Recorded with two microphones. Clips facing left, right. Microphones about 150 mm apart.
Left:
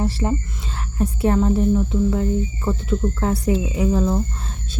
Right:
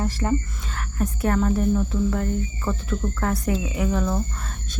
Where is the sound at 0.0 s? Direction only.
20° left (ahead or behind).